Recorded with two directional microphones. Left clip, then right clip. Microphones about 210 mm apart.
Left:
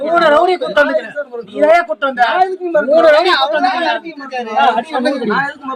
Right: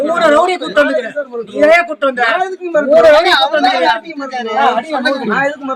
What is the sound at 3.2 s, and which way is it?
Speech, 20° left (ahead or behind).